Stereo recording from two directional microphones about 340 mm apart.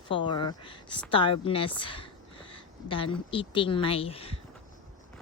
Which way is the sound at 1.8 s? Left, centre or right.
Centre.